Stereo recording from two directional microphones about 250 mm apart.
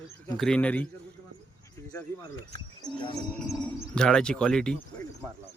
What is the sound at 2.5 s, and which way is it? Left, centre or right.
Speech, centre.